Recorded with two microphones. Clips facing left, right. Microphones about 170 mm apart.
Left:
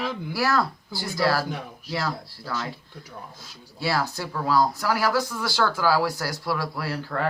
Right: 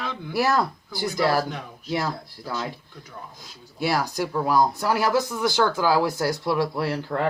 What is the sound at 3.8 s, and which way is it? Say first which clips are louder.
Speech: right 2 dB; 15° right (ahead or behind).